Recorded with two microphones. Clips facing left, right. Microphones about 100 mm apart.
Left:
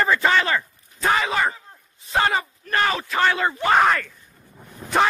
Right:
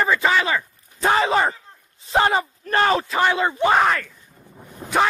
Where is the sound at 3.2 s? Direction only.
15° right (ahead or behind).